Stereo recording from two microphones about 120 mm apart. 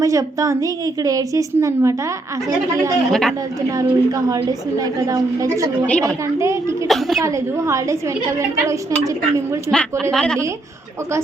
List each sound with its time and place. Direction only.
0.0 s a woman's voice: 25° right (ahead or behind)
3.1 s a woman's voice: 5° left (ahead or behind)
3.8 s a woman's voice: 30° right (ahead or behind)
5.8 s a woman's voice: 10° left (ahead or behind)
6.1 s a woman's voice: 25° right (ahead or behind)
6.8 s a woman's voice: centre (ahead or behind)
7.2 s a woman's voice: 25° right (ahead or behind)
10.0 s a woman's voice: 5° left (ahead or behind)